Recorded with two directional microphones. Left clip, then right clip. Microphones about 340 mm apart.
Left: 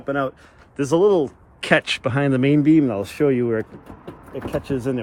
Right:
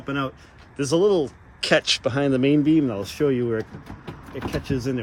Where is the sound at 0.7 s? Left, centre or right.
Left.